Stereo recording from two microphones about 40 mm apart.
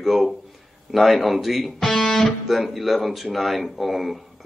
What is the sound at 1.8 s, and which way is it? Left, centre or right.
Speech, centre.